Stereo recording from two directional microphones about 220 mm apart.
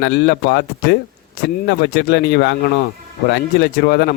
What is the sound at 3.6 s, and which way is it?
Speech, 45° left (ahead or behind).